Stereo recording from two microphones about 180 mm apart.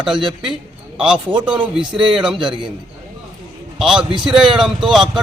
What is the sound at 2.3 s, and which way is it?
Speech, 25° right (ahead or behind).